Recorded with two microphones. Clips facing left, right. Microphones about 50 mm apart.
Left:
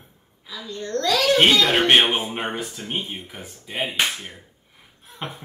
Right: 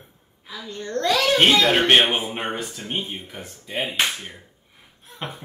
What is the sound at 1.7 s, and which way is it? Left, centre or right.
Speech, centre.